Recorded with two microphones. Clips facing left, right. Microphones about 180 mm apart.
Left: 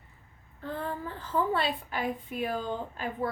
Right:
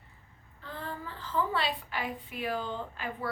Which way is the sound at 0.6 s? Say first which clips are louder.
Left 5 dB; 55° left (ahead or behind).